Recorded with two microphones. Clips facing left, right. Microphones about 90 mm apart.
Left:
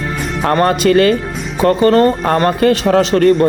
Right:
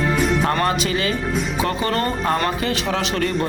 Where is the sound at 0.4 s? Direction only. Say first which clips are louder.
Left 8 dB; 50° left (ahead or behind).